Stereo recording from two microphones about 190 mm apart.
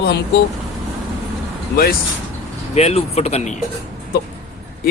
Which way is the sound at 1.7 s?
50° left (ahead or behind).